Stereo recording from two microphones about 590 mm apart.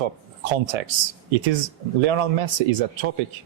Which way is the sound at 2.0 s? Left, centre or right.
Right.